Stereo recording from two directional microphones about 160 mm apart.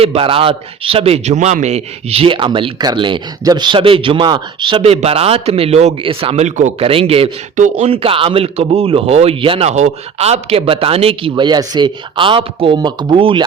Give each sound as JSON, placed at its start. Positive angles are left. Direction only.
{"t": 0.0, "sound": "a man's voice", "side_deg": -35}
{"t": 7.5, "sound": "a man's voice", "side_deg": -50}